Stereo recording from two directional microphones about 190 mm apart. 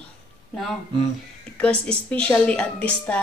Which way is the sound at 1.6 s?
5° left (ahead or behind).